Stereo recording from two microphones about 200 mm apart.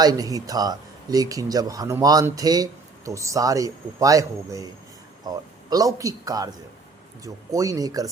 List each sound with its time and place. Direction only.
0.0 s speech: 20° right (ahead or behind)
7.5 s speech: 15° right (ahead or behind)